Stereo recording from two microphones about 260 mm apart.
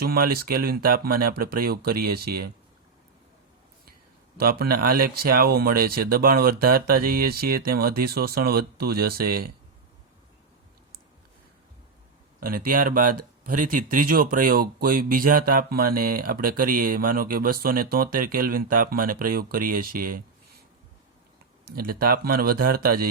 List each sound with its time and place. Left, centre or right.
0.0 s speech: right
4.4 s speech: right
12.4 s speech: right
21.8 s speech: right